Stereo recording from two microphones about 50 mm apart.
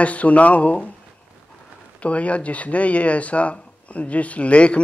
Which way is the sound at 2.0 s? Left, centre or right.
Left.